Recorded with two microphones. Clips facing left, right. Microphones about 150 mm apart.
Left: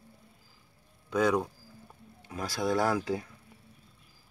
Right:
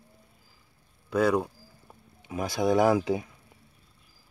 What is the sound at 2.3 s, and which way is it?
Speech, 20° right (ahead or behind).